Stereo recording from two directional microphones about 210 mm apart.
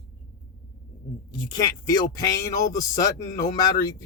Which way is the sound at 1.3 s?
20° left (ahead or behind).